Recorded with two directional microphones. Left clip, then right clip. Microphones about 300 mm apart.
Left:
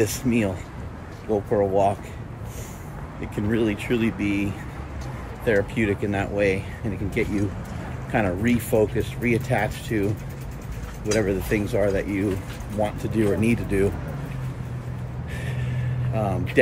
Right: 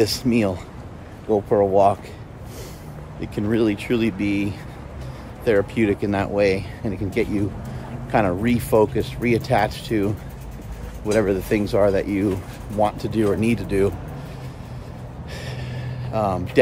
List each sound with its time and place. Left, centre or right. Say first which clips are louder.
0.0 s speech: right 3 dB; centre
3.2 s speech: right 3 dB; centre
11.1 s speech: right 3 dB; centre
15.4 s vehicle: left 1 dB; centre